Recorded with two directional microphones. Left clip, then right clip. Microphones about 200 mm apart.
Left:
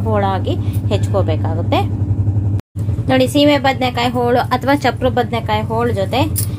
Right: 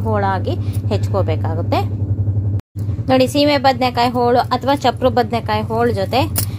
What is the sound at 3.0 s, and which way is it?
A woman's voice, 30° right (ahead or behind).